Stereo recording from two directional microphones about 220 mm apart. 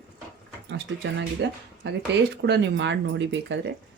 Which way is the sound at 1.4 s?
50° right (ahead or behind).